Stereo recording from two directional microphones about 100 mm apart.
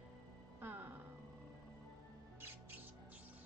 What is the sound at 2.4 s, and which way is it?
Music, 20° right (ahead or behind).